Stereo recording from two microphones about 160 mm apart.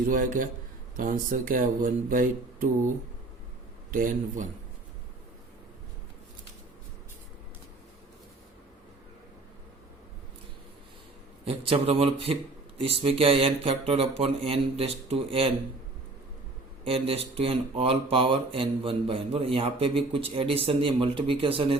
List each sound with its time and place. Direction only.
0.1 s speech: 60° right (ahead or behind)
3.9 s speech: 60° right (ahead or behind)
11.4 s speech: 35° right (ahead or behind)
16.8 s speech: 35° right (ahead or behind)